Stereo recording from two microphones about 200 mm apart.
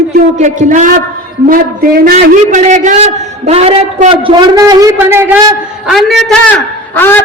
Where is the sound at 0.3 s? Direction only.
40° right (ahead or behind); by 5.4 s 10° right (ahead or behind).